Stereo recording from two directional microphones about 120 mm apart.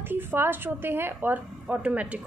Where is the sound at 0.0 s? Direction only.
15° right (ahead or behind).